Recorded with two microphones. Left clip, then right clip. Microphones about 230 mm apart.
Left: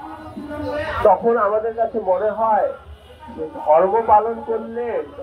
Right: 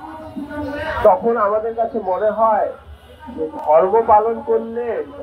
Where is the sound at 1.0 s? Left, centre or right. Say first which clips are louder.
Right 1 dB; right.